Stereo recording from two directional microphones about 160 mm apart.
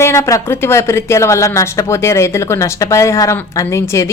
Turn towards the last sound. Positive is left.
turn(degrees=20)  # may be behind; listen again after turning